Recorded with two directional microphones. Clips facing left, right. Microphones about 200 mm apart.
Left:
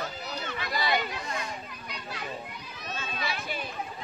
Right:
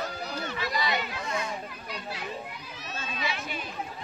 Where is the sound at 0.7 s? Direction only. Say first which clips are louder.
Left 2 dB; 35° left (ahead or behind).